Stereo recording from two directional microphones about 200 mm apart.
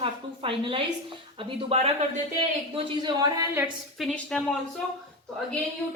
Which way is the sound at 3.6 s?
Centre (ahead or behind).